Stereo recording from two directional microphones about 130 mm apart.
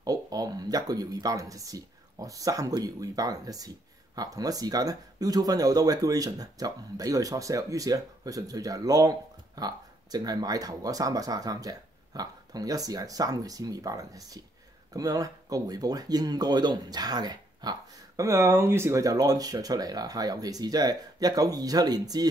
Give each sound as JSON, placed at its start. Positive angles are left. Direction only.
{"t": 0.0, "sound": "speech", "side_deg": -30}